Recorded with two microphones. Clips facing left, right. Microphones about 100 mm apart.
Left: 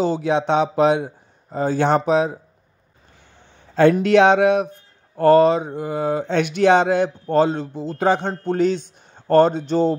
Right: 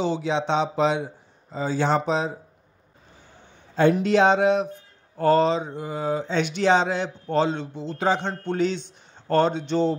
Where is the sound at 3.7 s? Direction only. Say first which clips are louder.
Left 5 dB; 85° left.